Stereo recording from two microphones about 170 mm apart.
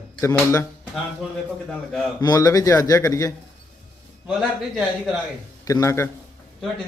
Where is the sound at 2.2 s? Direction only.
20° left (ahead or behind).